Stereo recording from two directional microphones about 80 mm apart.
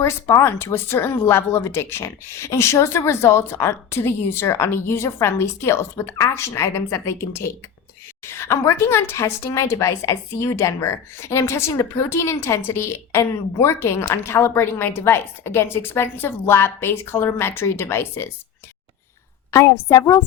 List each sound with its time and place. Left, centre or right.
0.0 s a woman's voice: left
19.5 s a woman's voice: left